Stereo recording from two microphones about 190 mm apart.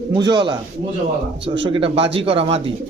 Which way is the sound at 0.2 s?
25° right (ahead or behind).